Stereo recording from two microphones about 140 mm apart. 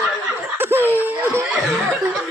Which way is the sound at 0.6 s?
15° right (ahead or behind).